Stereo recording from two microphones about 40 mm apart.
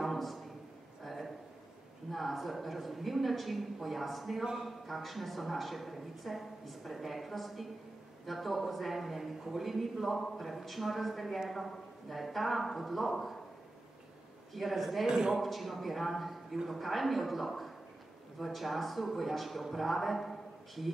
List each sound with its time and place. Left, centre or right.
0.0 s a sound: centre
2.0 s a man's voice: centre
14.5 s speech: centre
15.0 s a man's voice: centre
15.3 s speech: centre